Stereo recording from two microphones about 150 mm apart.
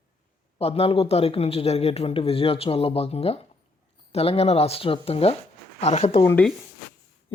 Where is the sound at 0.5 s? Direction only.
40° left (ahead or behind).